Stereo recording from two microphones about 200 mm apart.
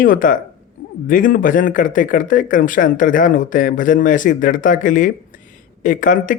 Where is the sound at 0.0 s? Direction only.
45° left (ahead or behind).